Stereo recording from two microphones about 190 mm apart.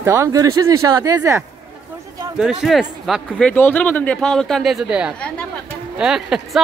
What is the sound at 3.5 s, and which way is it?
A man's voice, 10° left (ahead or behind).